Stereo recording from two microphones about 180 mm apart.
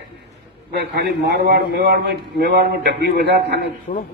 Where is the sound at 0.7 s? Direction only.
65° right (ahead or behind).